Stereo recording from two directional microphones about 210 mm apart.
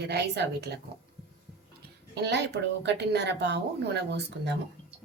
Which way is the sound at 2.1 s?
55° right (ahead or behind).